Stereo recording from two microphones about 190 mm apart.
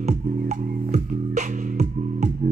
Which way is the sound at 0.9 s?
40° right (ahead or behind).